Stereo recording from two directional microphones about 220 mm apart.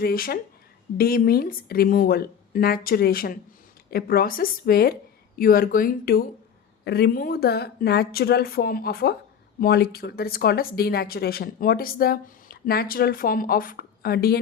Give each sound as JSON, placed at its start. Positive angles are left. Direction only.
{"t": 0.0, "sound": "speech", "side_deg": 40}